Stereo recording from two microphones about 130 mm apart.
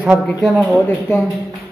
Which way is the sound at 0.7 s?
15° left (ahead or behind).